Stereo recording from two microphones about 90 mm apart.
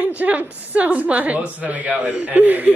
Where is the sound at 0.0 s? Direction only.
15° right (ahead or behind).